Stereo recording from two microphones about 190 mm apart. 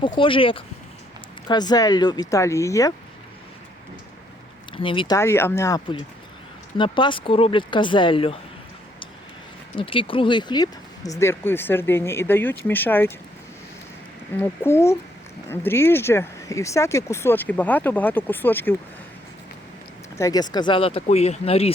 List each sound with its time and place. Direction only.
0.2 s speech: 25° left (ahead or behind)
4.8 s speech: 25° left (ahead or behind)
9.7 s speech: 25° left (ahead or behind); by 13.1 s 10° left (ahead or behind)
14.3 s speech: 10° left (ahead or behind)
20.1 s speech: 20° left (ahead or behind)